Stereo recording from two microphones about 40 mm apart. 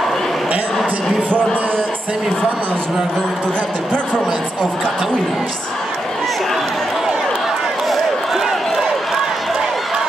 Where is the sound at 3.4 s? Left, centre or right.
Centre.